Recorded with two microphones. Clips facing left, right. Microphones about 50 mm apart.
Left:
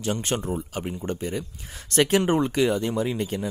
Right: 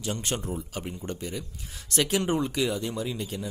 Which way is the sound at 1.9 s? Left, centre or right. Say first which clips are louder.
Left 5 dB; left.